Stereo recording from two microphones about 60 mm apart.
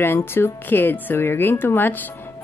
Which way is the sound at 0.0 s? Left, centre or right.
Left.